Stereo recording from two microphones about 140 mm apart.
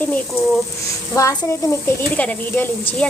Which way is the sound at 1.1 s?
25° left (ahead or behind).